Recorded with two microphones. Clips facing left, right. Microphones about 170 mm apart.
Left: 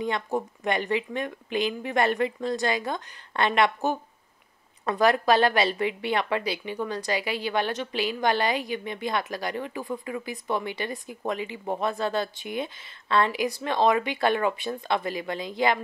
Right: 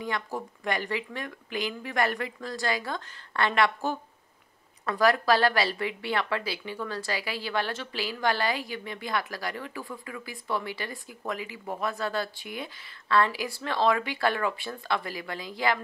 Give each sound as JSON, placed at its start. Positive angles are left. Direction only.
{"t": 0.0, "sound": "a woman's voice", "side_deg": 20}